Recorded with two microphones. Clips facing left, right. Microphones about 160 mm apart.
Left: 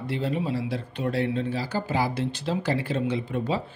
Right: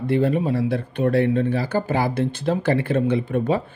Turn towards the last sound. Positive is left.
turn(degrees=-55)  # may be behind; listen again after turning